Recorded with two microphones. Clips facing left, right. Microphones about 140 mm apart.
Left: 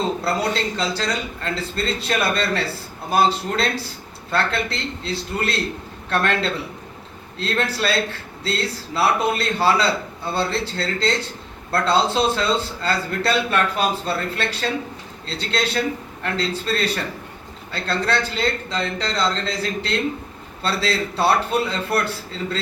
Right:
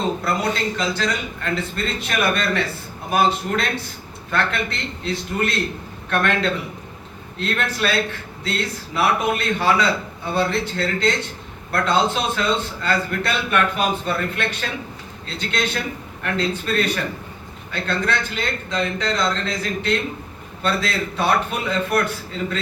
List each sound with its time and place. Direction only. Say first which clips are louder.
0.3 s a man's voice: even; 30° left (ahead or behind)